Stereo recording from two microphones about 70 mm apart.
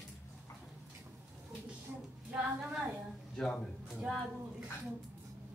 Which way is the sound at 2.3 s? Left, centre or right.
Centre.